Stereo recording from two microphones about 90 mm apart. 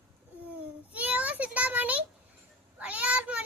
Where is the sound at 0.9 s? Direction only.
15° right (ahead or behind).